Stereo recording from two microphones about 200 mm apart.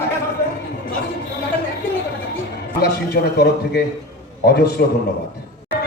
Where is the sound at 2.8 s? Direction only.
50° left (ahead or behind).